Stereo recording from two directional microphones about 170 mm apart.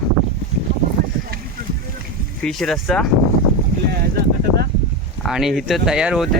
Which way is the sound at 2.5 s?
Centre (ahead or behind).